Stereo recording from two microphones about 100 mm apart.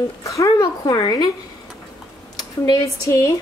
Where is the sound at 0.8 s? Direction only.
45° left (ahead or behind).